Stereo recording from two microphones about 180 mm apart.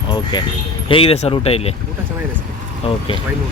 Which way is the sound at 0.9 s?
30° left (ahead or behind).